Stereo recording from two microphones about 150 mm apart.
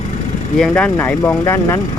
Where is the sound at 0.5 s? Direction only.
5° left (ahead or behind).